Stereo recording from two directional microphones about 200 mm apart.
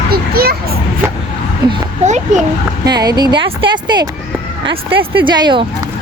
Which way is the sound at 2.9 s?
20° right (ahead or behind).